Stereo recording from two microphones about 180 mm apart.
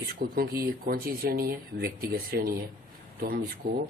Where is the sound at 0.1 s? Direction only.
55° right (ahead or behind).